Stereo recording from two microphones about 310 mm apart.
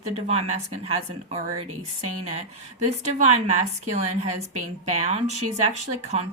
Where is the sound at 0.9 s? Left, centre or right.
Centre.